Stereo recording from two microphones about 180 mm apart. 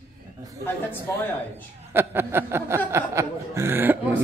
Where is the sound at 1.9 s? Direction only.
15° right (ahead or behind).